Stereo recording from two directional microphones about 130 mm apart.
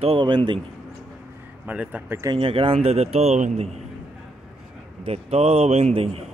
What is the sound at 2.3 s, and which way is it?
A man's voice, 45° right (ahead or behind).